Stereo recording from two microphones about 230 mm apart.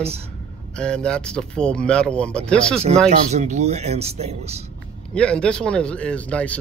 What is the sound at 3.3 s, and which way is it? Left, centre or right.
Speech, right.